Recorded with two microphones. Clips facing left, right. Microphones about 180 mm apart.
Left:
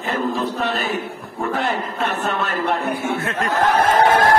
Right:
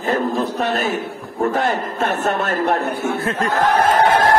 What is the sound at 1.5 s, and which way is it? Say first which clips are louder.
A man's voice: right 1 dB; 45° right (ahead or behind).